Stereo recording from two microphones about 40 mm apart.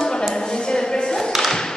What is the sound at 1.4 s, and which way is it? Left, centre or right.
Tap, centre.